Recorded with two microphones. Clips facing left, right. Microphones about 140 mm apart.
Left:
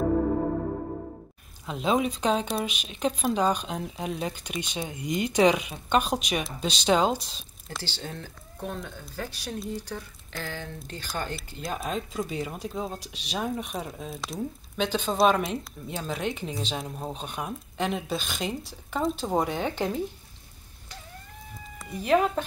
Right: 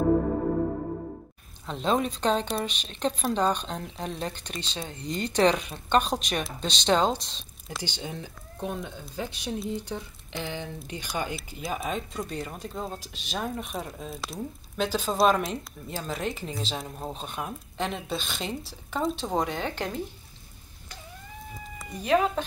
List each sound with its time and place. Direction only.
1.7 s speech: 5° left (ahead or behind)
7.8 s speech: 15° right (ahead or behind)
11.3 s speech: centre (ahead or behind)
21.7 s speech: 5° left (ahead or behind)